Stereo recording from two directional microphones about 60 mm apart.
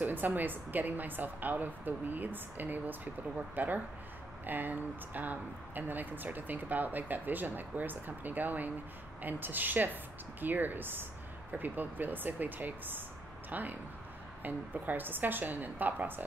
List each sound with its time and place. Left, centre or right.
0.0 s speech: right